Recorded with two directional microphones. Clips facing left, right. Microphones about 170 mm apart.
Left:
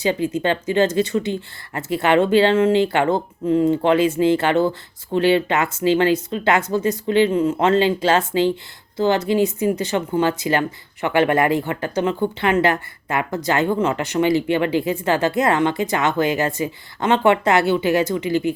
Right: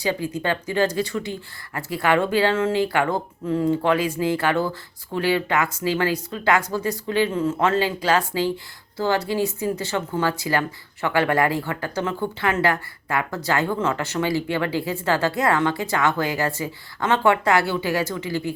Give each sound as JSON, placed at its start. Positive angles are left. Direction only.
{"t": 0.0, "sound": "speech", "side_deg": 20}